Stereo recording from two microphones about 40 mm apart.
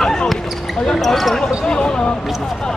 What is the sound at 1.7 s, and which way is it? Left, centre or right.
Speech, left.